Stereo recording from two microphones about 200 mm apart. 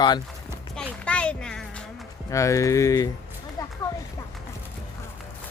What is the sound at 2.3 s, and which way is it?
Speech, 15° left (ahead or behind).